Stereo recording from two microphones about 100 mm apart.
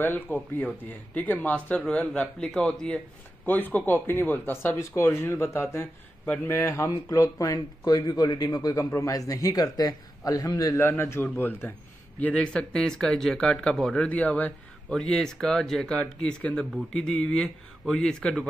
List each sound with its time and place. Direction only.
0.0 s speech: 20° left (ahead or behind)
3.4 s speech: 15° left (ahead or behind)
6.2 s a man's voice: 15° left (ahead or behind)
6.5 s speech: 30° left (ahead or behind)
10.8 s speech: 25° left (ahead or behind); by 18.5 s 10° left (ahead or behind)